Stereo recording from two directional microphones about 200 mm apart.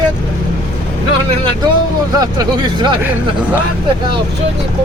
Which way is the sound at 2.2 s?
20° right (ahead or behind).